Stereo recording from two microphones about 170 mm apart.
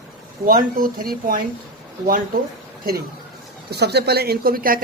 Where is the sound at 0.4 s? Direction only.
55° right (ahead or behind).